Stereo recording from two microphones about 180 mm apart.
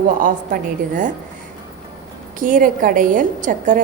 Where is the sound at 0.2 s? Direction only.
50° right (ahead or behind).